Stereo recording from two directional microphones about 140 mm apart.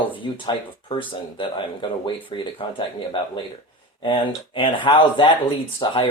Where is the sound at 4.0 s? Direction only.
35° left (ahead or behind).